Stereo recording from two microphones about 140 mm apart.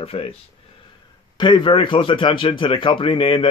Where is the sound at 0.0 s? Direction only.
45° left (ahead or behind).